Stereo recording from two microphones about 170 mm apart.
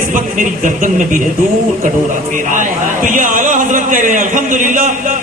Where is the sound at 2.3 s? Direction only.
50° right (ahead or behind).